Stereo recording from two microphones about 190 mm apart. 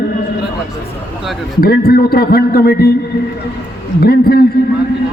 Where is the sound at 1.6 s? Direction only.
55° left (ahead or behind).